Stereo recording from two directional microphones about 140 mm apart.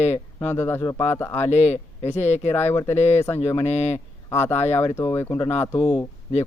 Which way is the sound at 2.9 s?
50° left (ahead or behind).